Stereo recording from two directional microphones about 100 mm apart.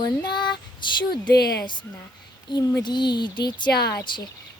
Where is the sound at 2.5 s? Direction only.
50° left (ahead or behind).